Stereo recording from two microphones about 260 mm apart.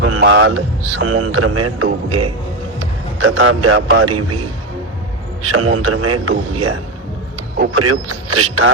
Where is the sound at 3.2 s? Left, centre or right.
Right.